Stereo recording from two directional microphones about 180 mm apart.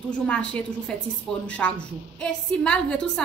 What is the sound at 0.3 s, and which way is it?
A woman's voice, 5° left (ahead or behind).